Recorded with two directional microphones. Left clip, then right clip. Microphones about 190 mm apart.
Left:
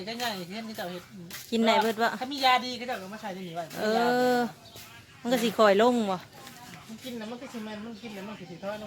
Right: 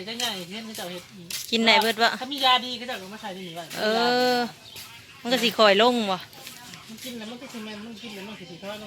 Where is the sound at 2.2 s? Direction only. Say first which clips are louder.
Right 3 dB; 15° left (ahead or behind).